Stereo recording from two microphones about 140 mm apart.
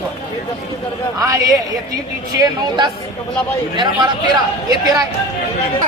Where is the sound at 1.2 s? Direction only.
25° right (ahead or behind).